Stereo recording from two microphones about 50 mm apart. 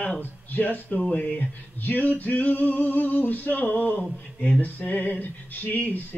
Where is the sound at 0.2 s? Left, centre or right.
Left.